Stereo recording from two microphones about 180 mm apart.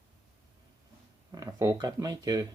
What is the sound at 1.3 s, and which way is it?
Speech, 20° right (ahead or behind).